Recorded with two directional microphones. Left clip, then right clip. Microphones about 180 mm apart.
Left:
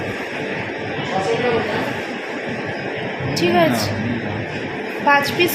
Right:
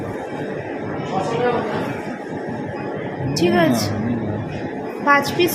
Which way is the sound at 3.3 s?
70° right (ahead or behind).